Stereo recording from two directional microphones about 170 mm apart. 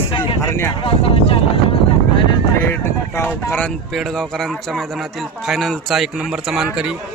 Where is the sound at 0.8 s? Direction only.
35° left (ahead or behind).